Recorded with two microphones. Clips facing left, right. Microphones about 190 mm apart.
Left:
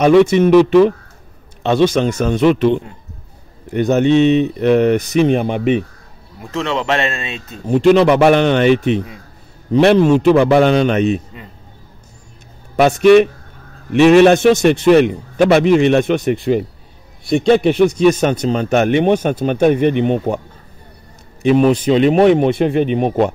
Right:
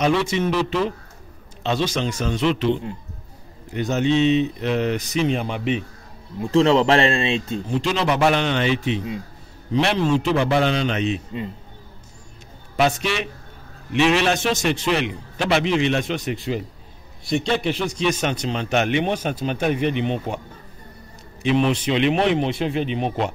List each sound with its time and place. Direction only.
0.0 s speech: 55° left (ahead or behind)
6.4 s speech: 30° right (ahead or behind)
7.6 s speech: 60° left (ahead or behind)
12.7 s a man's voice: 55° left (ahead or behind)
21.4 s a man's voice: 45° left (ahead or behind)